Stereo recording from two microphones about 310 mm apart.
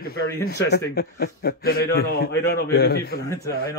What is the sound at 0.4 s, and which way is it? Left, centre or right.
A man's voice, left.